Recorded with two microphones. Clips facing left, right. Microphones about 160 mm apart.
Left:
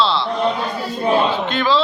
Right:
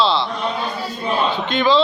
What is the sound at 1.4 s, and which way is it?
Speech, centre (ahead or behind).